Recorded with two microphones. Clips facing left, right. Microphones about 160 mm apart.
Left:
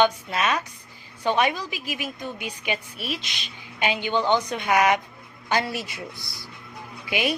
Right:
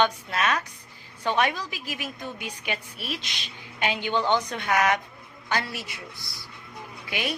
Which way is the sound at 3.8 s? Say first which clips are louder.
Left 2 dB; 5° left (ahead or behind).